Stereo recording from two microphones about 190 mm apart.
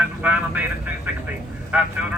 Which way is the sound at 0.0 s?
10° right (ahead or behind).